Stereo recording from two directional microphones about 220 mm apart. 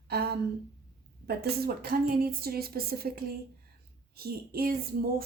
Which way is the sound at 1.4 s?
45° right (ahead or behind).